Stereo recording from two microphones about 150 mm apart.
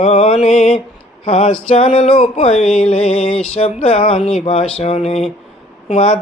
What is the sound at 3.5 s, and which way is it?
Speech, 45° left (ahead or behind).